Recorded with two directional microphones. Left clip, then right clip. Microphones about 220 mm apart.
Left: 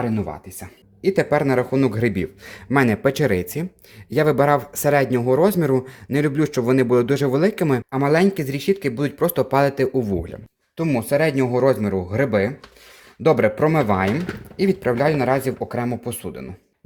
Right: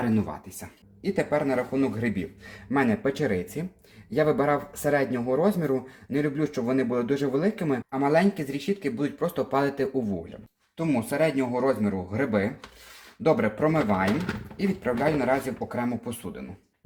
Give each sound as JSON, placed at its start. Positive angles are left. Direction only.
{"t": 1.0, "sound": "speech", "side_deg": 55}